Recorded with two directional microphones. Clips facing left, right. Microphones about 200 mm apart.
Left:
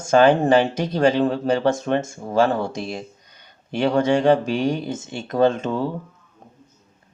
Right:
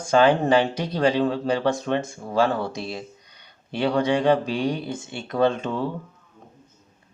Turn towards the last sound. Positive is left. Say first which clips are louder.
# left 3 dB
turn(degrees=45)  # may be behind; listen again after turning